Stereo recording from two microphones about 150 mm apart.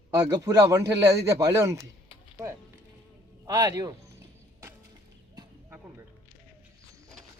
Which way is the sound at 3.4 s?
25° right (ahead or behind).